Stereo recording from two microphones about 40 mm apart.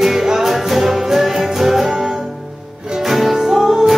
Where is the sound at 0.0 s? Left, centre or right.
Centre.